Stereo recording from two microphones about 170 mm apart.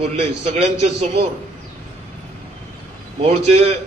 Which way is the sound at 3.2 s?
40° right (ahead or behind).